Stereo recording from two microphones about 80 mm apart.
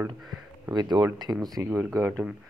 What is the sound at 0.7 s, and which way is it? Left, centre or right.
Speech, right.